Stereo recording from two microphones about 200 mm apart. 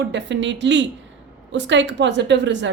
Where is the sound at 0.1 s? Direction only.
60° right (ahead or behind).